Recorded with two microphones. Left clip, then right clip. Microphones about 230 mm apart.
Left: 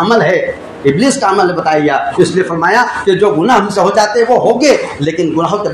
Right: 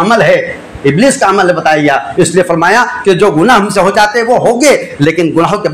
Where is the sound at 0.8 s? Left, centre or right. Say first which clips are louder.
Right 3 dB; right.